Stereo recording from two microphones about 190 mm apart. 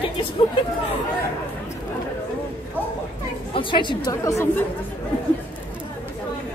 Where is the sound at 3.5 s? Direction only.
25° left (ahead or behind).